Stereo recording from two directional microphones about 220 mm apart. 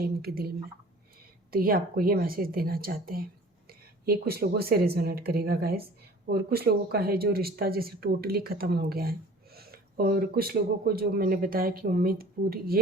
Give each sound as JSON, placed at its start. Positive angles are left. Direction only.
{"t": 0.0, "sound": "speech", "side_deg": -45}